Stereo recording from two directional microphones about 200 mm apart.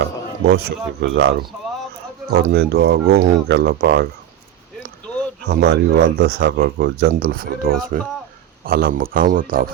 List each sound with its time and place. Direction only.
0.0 s a man's voice: 55° right (ahead or behind)
5.5 s speech: 50° right (ahead or behind)